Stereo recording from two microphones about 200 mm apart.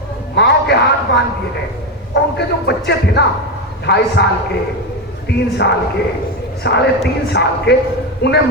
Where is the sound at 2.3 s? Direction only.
55° left (ahead or behind).